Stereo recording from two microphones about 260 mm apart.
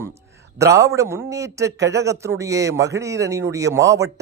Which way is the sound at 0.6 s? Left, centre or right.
Centre.